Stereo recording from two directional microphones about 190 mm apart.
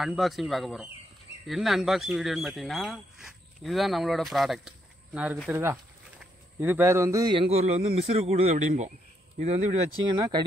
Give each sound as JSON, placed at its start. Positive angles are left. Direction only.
{"t": 0.0, "sound": "speech", "side_deg": 0}
{"t": 10.0, "sound": "speech", "side_deg": -25}